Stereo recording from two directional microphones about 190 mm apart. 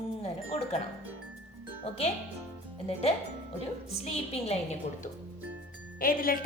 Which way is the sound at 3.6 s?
35° left (ahead or behind).